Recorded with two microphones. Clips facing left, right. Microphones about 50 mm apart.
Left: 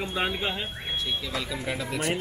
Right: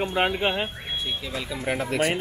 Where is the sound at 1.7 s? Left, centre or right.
Right.